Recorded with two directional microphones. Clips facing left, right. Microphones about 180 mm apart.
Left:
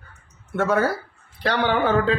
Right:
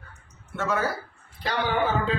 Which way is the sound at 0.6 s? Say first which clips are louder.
Left 6 dB; 60° left (ahead or behind).